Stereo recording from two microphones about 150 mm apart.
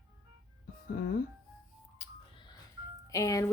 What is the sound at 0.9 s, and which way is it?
Speech, 80° left.